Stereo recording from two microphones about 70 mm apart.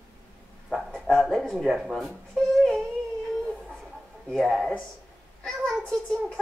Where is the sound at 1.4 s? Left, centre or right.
Centre.